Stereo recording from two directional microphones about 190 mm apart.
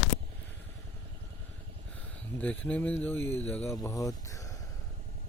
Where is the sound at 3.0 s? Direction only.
10° left (ahead or behind).